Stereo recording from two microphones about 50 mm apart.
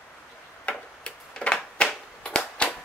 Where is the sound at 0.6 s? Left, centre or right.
Left.